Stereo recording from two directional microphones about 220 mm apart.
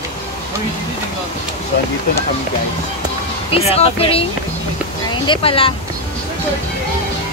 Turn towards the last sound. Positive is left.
turn(degrees=25)  # may be behind; listen again after turning